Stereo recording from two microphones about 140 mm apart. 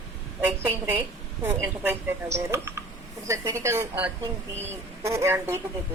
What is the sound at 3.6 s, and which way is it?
A woman's voice, 20° right (ahead or behind).